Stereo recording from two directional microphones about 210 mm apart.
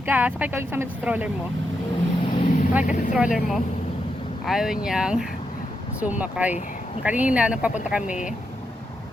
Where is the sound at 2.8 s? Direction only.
40° left (ahead or behind).